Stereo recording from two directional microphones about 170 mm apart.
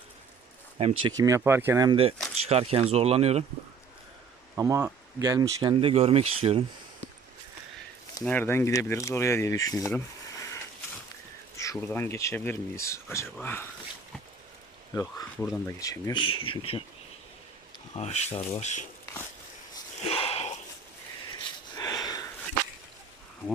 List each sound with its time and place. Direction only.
0.8 s speech: 35° right (ahead or behind)
1.1 s speech: 20° right (ahead or behind)
2.5 s speech: 35° right (ahead or behind)
4.5 s speech: 20° right (ahead or behind)
5.8 s speech: 35° right (ahead or behind)
8.2 s speech: 10° left (ahead or behind)
11.5 s speech: 20° left (ahead or behind)
15.6 s speech: 20° left (ahead or behind)
17.9 s speech: 40° left (ahead or behind)
20.1 s a sound: 35° left (ahead or behind)
21.3 s sniff: 25° left (ahead or behind)